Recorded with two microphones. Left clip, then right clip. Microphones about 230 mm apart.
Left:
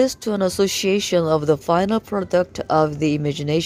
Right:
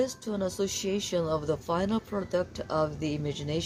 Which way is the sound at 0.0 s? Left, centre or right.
Left.